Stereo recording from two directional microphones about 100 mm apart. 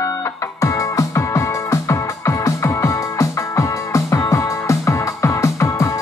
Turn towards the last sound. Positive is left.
turn(degrees=30)  # may be behind; listen again after turning